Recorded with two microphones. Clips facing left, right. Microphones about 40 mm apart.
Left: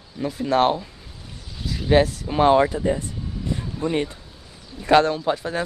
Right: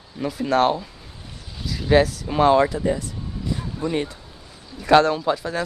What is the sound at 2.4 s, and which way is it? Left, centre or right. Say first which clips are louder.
Speech: even; centre.